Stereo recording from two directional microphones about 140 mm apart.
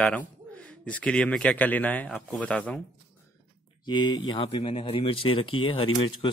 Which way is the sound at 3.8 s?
30° left (ahead or behind).